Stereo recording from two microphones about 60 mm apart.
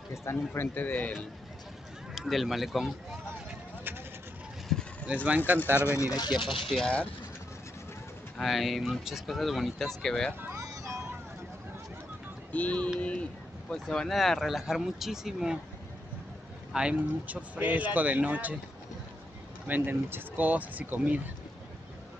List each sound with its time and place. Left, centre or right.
0.1 s a man's voice: left
0.5 s speech: left
2.1 s speech: centre
4.7 s vehicle: centre
5.0 s speech: right
5.9 s speech: left
6.4 s speech: centre
8.4 s speech: centre
10.6 s vehicle: right
12.5 s speech: left; by 15.6 s centre
16.7 s speech: right
19.7 s speech: right